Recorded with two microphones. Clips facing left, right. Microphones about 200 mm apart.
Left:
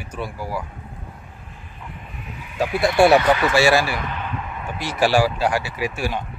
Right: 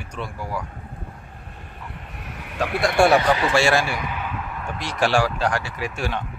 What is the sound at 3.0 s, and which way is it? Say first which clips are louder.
Speech: left 3 dB; 5° left (ahead or behind).